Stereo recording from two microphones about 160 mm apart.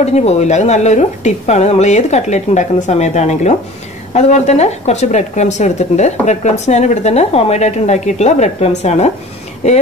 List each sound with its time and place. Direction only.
0.0 s speech: 40° left (ahead or behind)